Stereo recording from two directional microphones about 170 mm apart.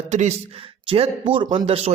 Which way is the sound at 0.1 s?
45° right (ahead or behind).